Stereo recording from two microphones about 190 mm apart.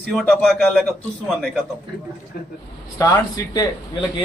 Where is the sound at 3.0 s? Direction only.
15° left (ahead or behind).